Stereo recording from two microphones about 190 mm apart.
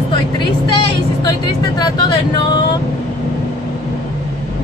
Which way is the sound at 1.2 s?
20° left (ahead or behind).